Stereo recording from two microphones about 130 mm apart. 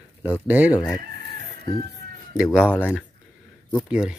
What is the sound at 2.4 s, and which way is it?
Speech, 5° right (ahead or behind).